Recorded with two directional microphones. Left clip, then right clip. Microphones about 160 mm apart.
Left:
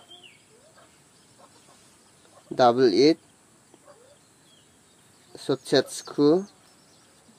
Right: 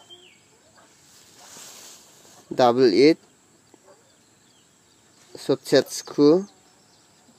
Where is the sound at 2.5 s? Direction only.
10° right (ahead or behind).